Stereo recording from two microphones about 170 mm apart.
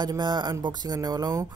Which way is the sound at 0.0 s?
25° right (ahead or behind).